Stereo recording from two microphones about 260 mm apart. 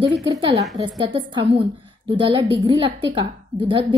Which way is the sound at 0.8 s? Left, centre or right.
Centre.